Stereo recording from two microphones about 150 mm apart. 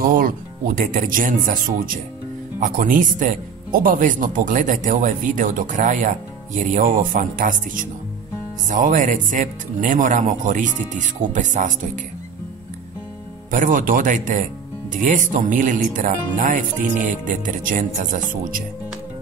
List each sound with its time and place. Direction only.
0.1 s speech: 65° right (ahead or behind)
13.5 s speech: 65° right (ahead or behind)